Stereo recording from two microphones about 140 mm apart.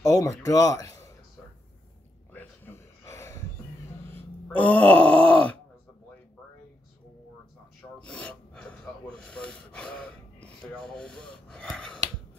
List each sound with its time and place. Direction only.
0.0 s speech: 25° left (ahead or behind)
2.3 s a sound: 15° left (ahead or behind)
4.5 s groan: 10° left (ahead or behind)
8.0 s filing: 10° left (ahead or behind)
9.2 s gasp: 5° left (ahead or behind)